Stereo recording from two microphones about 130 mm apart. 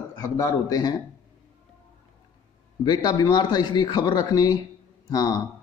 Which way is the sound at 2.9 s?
30° left (ahead or behind).